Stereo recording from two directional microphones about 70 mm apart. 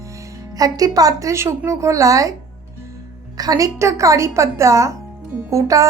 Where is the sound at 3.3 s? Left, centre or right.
Right.